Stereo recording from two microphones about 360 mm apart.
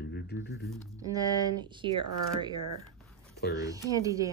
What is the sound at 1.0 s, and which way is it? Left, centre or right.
Speech, centre.